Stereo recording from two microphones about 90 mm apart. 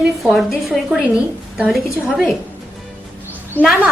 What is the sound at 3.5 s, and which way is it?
Speech, 20° left (ahead or behind).